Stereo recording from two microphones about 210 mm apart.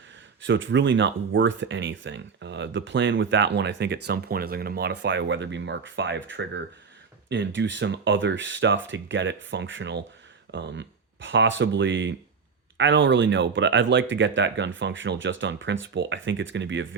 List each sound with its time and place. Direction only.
0.4 s speech: 60° right (ahead or behind)